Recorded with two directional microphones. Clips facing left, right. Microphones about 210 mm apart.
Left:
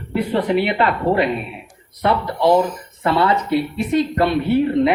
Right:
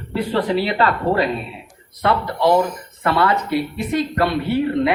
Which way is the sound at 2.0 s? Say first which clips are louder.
Left 1 dB; 20° left (ahead or behind).